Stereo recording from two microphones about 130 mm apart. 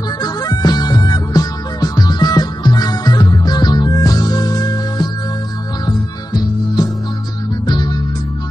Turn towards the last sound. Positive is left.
turn(degrees=35)  # may be behind; listen again after turning